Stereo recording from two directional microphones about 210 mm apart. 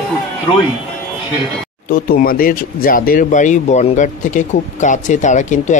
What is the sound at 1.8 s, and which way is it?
Speech, 45° left (ahead or behind).